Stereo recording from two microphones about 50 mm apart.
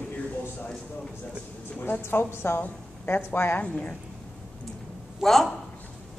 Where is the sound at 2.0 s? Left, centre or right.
Left.